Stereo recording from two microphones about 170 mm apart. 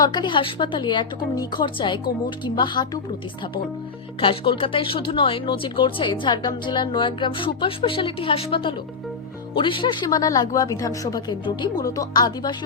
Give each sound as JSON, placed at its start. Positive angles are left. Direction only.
{"t": 0.0, "sound": "speech", "side_deg": 25}
{"t": 4.2, "sound": "speech", "side_deg": 30}